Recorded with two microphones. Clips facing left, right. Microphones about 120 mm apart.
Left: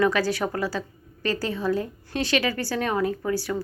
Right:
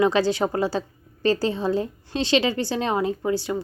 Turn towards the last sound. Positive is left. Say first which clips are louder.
# right 2 dB
turn(degrees=-25)  # may be behind; listen again after turning